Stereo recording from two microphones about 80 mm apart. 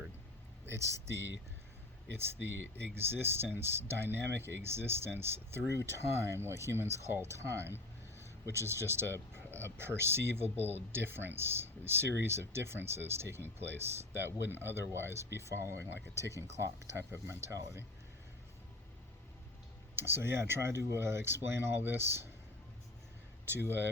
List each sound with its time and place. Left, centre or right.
0.7 s speech: right
2.1 s speech: right
20.0 s speech: right